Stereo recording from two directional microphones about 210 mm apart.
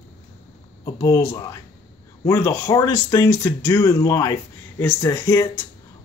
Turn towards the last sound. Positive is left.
turn(degrees=15)  # may be behind; listen again after turning